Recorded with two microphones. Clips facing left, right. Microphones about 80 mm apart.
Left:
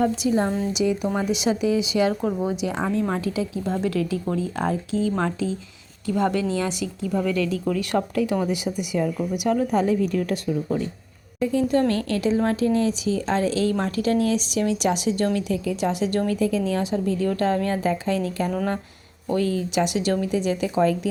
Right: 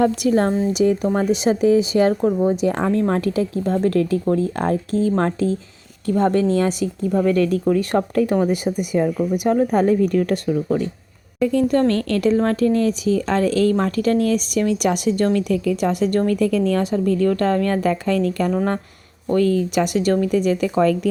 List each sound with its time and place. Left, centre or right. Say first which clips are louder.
0.0 s a woman's voice: right 4 dB; right
0.7 s a woman's voice: right 5 dB; right
2.7 s a woman's voice: right 5 dB; right
7.0 s a woman's voice: right 6 dB; right
11.3 s a woman's voice: right 4 dB; right
18.5 s a woman's voice: right 4 dB; right